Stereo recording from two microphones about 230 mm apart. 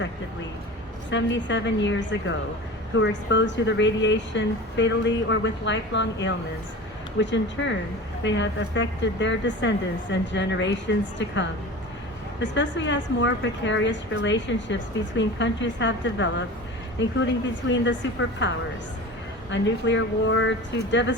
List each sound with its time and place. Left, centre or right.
1.1 s a woman's voice: left
12.4 s a woman's voice: left